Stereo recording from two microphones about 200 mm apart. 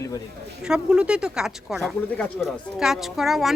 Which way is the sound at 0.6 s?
5° right (ahead or behind).